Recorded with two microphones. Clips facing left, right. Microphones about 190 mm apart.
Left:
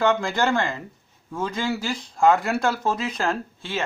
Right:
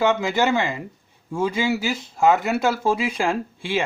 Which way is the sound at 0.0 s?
5° right (ahead or behind).